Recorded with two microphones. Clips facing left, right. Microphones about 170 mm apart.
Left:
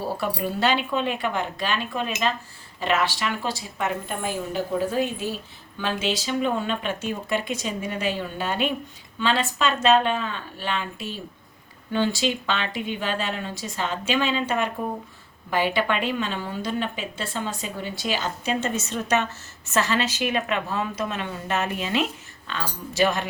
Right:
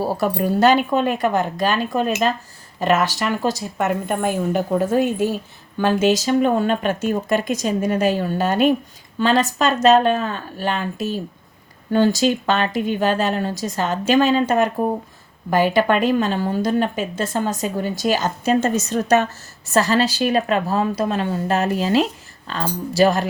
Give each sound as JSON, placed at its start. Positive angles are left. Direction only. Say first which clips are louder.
{"t": 0.3, "sound": "a woman's voice", "louder": "right 9 dB", "side_deg": -40}